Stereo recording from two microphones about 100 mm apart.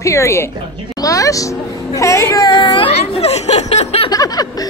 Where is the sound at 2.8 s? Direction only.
90° left.